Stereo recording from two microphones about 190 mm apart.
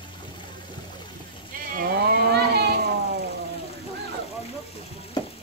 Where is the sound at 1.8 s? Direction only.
55° right (ahead or behind).